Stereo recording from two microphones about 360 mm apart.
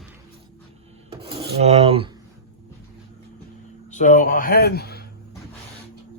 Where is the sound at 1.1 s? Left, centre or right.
Centre.